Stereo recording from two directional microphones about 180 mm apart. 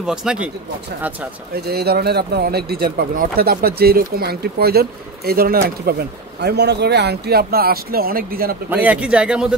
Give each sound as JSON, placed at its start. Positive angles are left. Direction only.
{"t": 0.0, "sound": "speech", "side_deg": -5}
{"t": 1.5, "sound": "speech", "side_deg": -60}
{"t": 8.6, "sound": "speech", "side_deg": -10}